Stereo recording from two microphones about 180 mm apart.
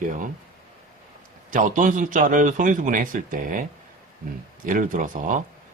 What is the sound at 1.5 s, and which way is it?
A man's voice, 45° right (ahead or behind).